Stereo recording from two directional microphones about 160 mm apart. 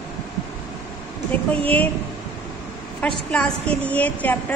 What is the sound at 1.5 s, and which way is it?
Speech, 10° left (ahead or behind).